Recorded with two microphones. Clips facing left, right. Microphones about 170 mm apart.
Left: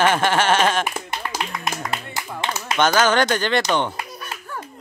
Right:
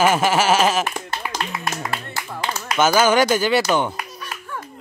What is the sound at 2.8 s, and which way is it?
Speech, 10° right (ahead or behind).